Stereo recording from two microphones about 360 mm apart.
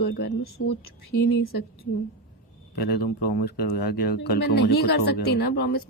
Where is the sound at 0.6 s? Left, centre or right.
Left.